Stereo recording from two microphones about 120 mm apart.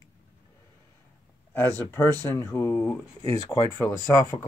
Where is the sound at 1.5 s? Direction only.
20° left (ahead or behind).